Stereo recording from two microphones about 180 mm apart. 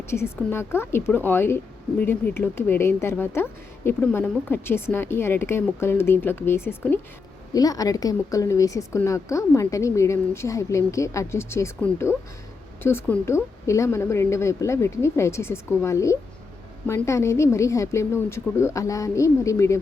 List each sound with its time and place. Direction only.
0.1 s speech: 15° left (ahead or behind)